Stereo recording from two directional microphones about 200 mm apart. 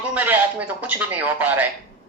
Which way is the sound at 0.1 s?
10° right (ahead or behind).